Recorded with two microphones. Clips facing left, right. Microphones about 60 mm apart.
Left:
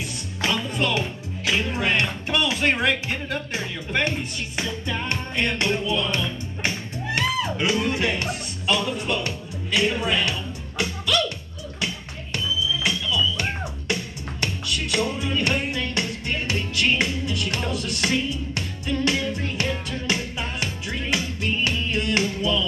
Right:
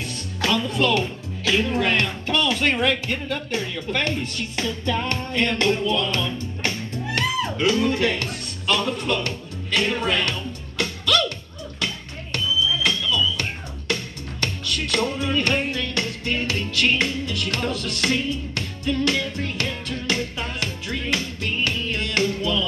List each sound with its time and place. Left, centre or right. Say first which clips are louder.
0.4 s music: right 3 dB; left
1.7 s speech: right 2 dB; left
12.8 s music: right 1 dB; centre